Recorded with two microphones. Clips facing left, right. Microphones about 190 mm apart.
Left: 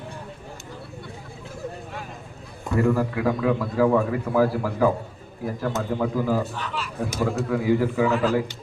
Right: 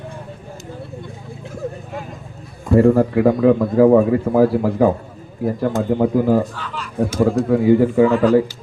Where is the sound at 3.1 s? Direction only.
40° right (ahead or behind).